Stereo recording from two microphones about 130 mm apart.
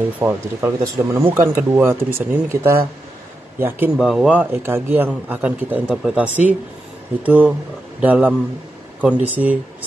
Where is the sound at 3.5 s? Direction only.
15° right (ahead or behind).